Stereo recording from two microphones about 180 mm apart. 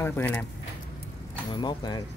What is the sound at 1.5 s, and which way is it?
Speech, 25° left (ahead or behind).